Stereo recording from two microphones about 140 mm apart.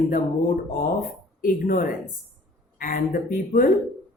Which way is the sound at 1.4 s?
85° left.